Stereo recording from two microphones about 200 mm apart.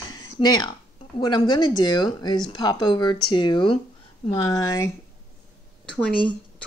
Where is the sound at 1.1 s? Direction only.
20° left (ahead or behind).